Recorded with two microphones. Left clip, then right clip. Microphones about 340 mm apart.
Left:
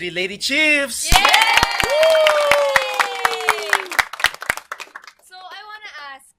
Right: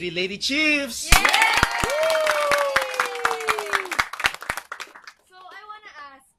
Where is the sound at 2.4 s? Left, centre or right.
Left.